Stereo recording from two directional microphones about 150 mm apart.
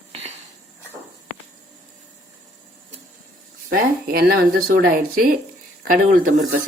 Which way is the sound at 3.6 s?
85° right.